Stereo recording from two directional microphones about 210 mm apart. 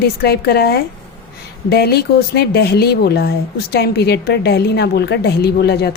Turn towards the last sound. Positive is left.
turn(degrees=50)  # may be behind; listen again after turning